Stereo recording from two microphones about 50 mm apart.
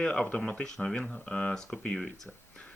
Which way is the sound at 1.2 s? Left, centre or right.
Left.